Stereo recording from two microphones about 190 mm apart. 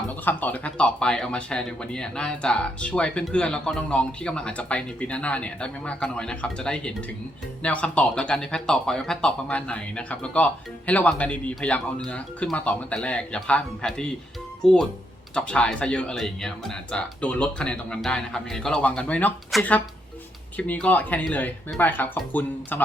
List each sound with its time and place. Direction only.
0.3 s speech: 10° left (ahead or behind)